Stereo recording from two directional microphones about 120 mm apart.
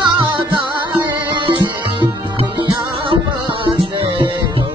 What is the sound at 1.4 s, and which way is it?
Music, 40° right (ahead or behind).